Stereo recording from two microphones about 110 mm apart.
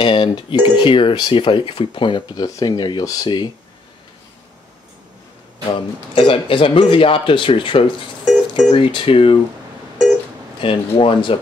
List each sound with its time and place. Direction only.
0.0 s speech: 50° left (ahead or behind)
5.7 s speech: 55° left (ahead or behind)
10.6 s speech: 55° left (ahead or behind)